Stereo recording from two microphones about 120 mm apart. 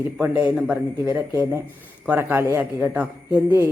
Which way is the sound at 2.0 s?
15° right (ahead or behind).